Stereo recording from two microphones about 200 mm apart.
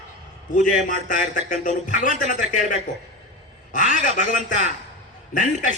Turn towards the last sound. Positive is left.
turn(degrees=40)  # may be behind; listen again after turning